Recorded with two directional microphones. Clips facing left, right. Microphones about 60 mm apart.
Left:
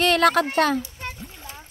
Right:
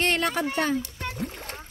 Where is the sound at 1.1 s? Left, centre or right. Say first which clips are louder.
Right 5 dB; right.